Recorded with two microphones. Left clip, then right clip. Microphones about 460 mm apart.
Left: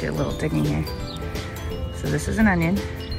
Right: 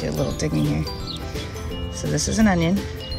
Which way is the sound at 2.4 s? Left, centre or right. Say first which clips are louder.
Even; centre.